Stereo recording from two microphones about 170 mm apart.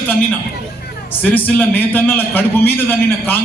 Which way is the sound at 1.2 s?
10° left (ahead or behind).